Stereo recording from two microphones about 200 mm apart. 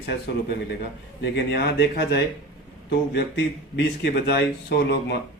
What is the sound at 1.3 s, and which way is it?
Speech, 55° left (ahead or behind).